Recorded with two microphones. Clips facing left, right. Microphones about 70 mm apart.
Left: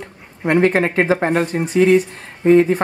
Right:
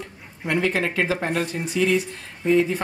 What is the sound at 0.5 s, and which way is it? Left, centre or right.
Speech, left.